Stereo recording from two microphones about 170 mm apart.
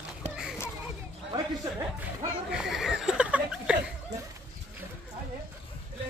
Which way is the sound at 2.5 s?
5° right (ahead or behind).